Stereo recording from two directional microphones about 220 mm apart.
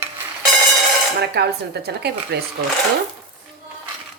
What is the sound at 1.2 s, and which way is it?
A woman's voice, 50° right (ahead or behind).